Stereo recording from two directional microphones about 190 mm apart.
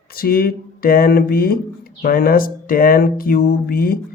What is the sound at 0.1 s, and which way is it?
Speech, 50° left (ahead or behind).